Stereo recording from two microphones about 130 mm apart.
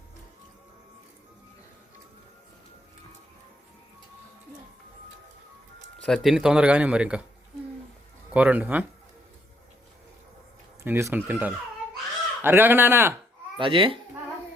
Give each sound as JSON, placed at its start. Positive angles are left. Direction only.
{"t": 6.0, "sound": "speech", "side_deg": 0}
{"t": 8.3, "sound": "speech", "side_deg": -10}
{"t": 10.8, "sound": "speech", "side_deg": -15}
{"t": 13.6, "sound": "speech", "side_deg": -40}